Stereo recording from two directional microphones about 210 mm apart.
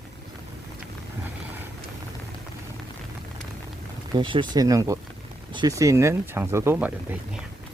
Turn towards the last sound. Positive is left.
turn(degrees=-5)  # may be behind; listen again after turning